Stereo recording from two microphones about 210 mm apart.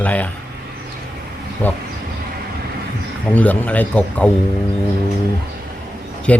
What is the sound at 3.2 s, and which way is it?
Speech, 5° left (ahead or behind).